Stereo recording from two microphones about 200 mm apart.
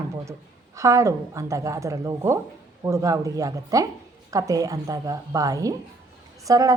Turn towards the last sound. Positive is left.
turn(degrees=-15)  # may be behind; listen again after turning